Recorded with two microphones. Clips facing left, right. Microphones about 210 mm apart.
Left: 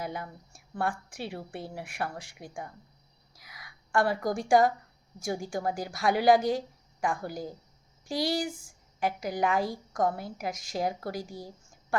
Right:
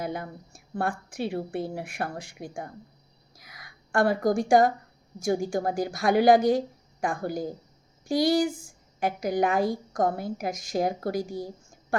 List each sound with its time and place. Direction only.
0.0 s a woman's voice: 45° right (ahead or behind)
11.2 s a woman's voice: 20° right (ahead or behind)